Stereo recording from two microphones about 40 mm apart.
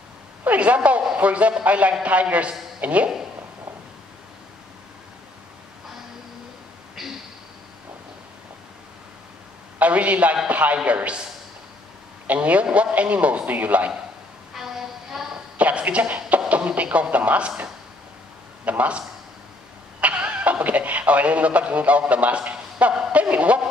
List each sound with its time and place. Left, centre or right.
0.5 s a man's voice: right
7.0 s a sound: centre
9.8 s a man's voice: right
12.3 s speech: right
14.5 s music: centre
15.5 s a woman's voice: right
18.7 s speech: right
20.2 s speech: right
23.1 s a sound: right